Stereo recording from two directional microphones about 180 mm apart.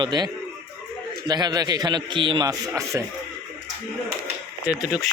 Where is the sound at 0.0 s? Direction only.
25° right (ahead or behind).